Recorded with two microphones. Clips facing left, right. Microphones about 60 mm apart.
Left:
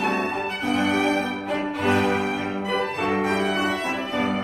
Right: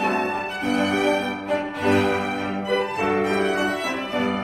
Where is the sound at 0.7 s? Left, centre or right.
Right.